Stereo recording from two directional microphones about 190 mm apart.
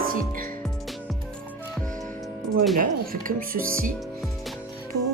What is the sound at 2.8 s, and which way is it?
Speech, 45° right (ahead or behind).